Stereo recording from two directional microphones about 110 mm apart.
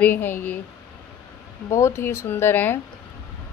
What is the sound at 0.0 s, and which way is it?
Speech, 15° left (ahead or behind).